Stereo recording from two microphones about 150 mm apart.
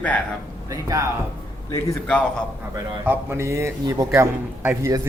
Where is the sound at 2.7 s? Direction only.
15° right (ahead or behind).